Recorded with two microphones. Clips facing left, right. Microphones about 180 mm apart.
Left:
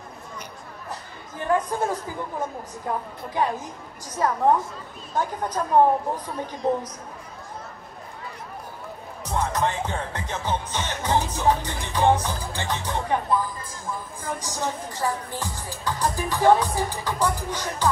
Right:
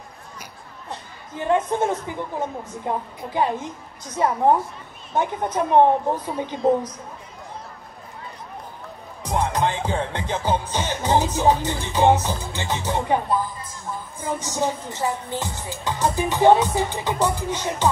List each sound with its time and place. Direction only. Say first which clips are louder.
1.4 s music: right 3 dB; 25° right (ahead or behind)
9.2 s music: right 3 dB; 30° right (ahead or behind)